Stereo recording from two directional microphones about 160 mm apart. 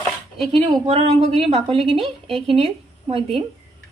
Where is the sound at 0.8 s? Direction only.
40° right (ahead or behind).